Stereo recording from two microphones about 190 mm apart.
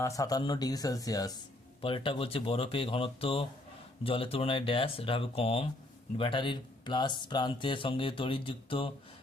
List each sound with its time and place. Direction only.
0.0 s speech: 20° left (ahead or behind)